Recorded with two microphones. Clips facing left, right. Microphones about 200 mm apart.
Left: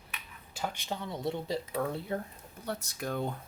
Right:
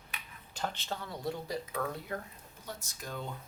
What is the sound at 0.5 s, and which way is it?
Speech, 10° left (ahead or behind).